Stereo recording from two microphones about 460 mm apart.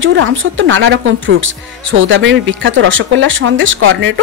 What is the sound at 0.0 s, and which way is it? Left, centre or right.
Speech, right.